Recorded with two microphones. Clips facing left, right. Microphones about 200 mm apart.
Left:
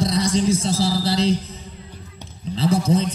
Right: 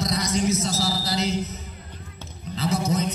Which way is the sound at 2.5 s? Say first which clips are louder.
Left 5 dB; 30° left (ahead or behind).